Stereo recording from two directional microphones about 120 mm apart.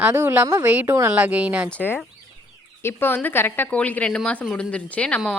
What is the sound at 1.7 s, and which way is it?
Speech, 15° left (ahead or behind).